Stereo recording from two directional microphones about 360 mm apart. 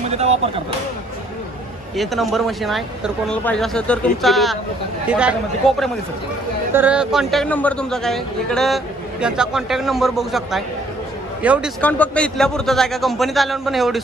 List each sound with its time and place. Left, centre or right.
0.1 s speech: centre
2.0 s a man's voice: centre